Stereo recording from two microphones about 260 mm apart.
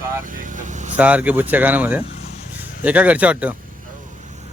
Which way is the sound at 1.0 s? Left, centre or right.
Centre.